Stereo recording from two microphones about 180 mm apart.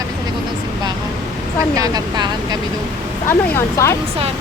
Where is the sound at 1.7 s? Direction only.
20° right (ahead or behind).